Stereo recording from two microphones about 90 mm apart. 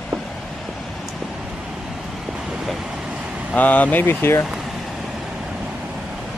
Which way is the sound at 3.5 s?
15° left (ahead or behind).